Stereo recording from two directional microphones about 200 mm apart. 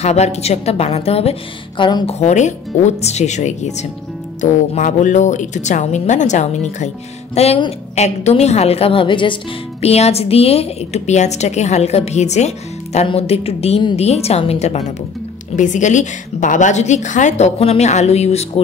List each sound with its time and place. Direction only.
0.0 s a woman's voice: 35° left (ahead or behind)
2.1 s a woman's voice: 35° left (ahead or behind)